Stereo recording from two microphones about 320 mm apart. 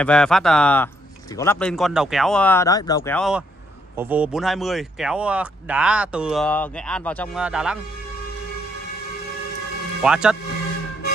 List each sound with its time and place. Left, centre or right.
0.0 s speech: centre
10.0 s speech: centre